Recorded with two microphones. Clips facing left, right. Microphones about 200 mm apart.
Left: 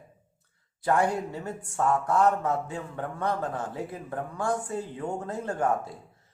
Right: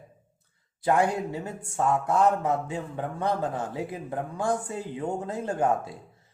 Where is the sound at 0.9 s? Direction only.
15° right (ahead or behind).